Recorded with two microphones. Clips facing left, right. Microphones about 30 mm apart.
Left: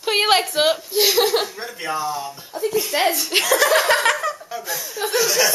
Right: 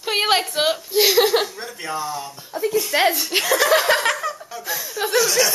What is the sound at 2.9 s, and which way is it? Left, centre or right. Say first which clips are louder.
Speech: right 3 dB; centre.